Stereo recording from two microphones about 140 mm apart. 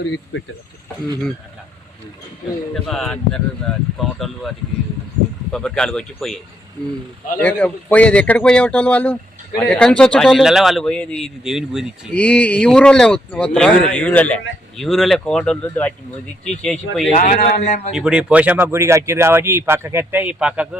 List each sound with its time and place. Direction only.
2.7 s a man's voice: centre (ahead or behind)
12.1 s a man's voice: 10° left (ahead or behind)
17.2 s speech: 80° left; by 17.9 s 60° left (ahead or behind)
17.9 s speech: 5° right (ahead or behind)